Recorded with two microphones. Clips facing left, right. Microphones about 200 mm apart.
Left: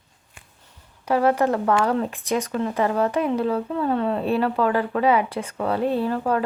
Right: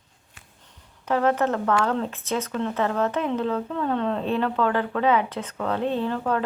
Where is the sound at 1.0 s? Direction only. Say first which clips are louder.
Left 2 dB; 10° left (ahead or behind).